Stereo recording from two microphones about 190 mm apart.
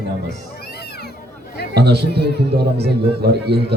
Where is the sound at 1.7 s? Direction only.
60° right (ahead or behind).